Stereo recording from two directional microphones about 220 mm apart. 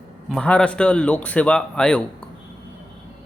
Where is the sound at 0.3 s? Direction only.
5° left (ahead or behind).